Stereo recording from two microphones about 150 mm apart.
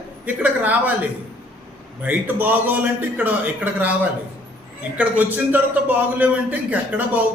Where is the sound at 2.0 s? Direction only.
10° right (ahead or behind).